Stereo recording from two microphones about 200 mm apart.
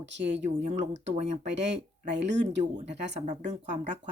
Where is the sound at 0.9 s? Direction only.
65° right (ahead or behind).